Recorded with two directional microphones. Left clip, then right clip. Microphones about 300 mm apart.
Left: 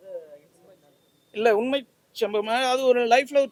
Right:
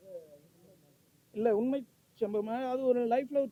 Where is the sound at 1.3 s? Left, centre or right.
Centre.